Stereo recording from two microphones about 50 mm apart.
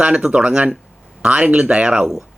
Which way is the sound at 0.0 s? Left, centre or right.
Right.